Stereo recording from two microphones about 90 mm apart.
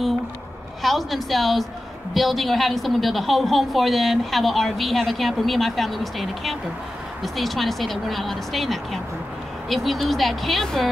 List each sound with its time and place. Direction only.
0.8 s a woman's voice: centre (ahead or behind)